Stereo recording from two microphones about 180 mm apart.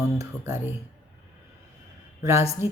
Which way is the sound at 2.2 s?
15° right (ahead or behind).